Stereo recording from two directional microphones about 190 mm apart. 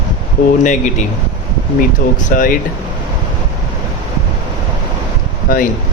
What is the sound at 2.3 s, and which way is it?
Speech, 45° left (ahead or behind).